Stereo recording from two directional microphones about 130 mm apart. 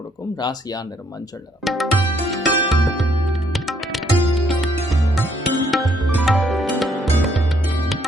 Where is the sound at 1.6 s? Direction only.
Centre (ahead or behind).